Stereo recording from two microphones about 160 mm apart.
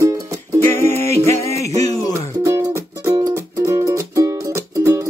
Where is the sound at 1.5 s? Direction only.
40° right (ahead or behind).